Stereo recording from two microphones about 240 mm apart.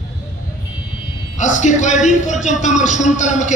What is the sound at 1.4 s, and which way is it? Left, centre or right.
A man's voice, left.